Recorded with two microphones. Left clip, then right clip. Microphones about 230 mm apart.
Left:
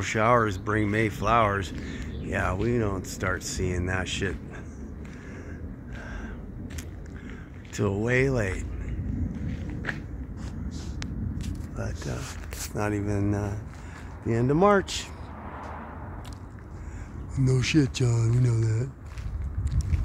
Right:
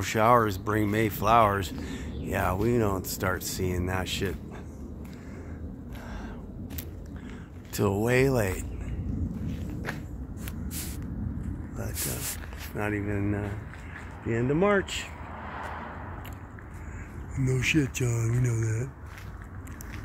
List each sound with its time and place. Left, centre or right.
0.0 s speech: centre
7.7 s speech: centre
11.7 s a sound: centre
12.7 s speech: centre
14.2 s speech: left
17.5 s speech: left